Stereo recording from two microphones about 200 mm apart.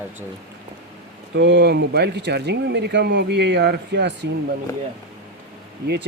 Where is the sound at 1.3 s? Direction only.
60° right (ahead or behind).